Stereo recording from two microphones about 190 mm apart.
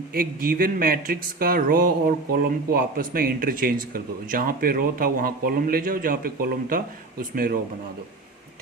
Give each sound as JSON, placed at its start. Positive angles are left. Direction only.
{"t": 0.1, "sound": "speech", "side_deg": -50}